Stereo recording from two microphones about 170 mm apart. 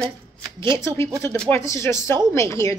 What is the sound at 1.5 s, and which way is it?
A woman's voice, 15° left (ahead or behind).